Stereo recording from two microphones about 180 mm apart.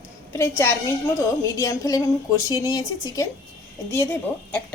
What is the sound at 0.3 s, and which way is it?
A woman's voice, 15° left (ahead or behind).